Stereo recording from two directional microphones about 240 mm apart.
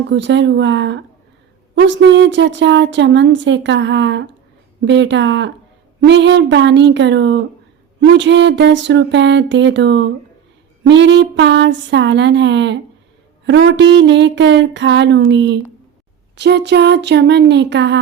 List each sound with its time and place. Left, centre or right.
0.1 s speech: right